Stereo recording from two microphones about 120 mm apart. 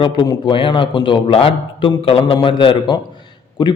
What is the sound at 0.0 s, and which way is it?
A man's voice, 40° left (ahead or behind).